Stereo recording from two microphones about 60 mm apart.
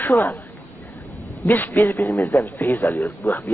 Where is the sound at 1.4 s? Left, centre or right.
Left.